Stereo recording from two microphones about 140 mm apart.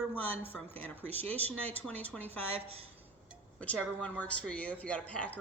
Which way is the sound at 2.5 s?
45° right (ahead or behind).